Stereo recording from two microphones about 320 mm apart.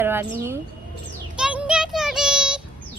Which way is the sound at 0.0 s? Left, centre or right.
Centre.